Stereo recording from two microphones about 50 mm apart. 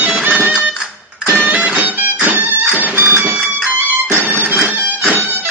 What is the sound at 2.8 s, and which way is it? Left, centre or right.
Printer, right.